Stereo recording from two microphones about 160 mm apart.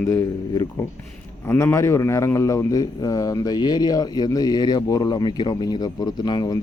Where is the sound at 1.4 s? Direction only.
15° left (ahead or behind).